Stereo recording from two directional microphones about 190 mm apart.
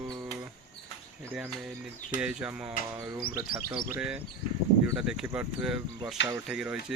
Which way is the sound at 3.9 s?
5° right (ahead or behind).